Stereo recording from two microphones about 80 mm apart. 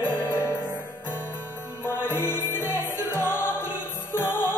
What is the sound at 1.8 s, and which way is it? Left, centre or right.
Music, left.